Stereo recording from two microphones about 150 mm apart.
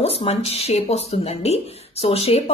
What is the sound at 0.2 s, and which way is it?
Speech, 45° left (ahead or behind).